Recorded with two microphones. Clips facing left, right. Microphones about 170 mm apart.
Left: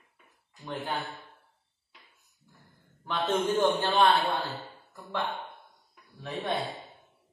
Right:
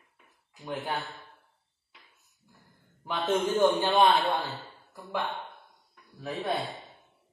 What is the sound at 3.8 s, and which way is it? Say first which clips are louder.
Speech: right 1 dB; 15° right (ahead or behind).